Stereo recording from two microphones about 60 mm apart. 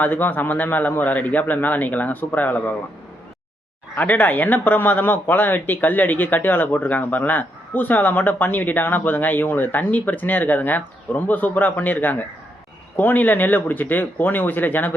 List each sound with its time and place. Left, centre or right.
0.0 s a man's voice: left
3.9 s speech: left